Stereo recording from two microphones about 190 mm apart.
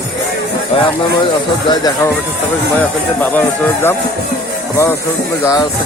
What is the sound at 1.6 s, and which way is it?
Speech, 20° left (ahead or behind).